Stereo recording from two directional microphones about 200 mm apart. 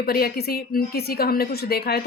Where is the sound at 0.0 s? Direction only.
50° left (ahead or behind).